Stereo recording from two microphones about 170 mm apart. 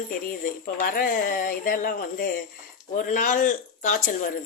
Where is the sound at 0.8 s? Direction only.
60° left (ahead or behind).